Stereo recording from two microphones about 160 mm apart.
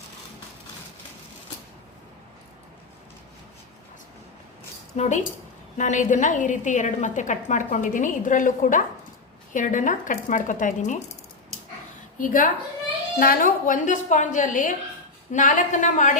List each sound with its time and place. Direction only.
4.9 s a woman's voice: 45° left (ahead or behind)
12.1 s a woman's voice: 55° left (ahead or behind)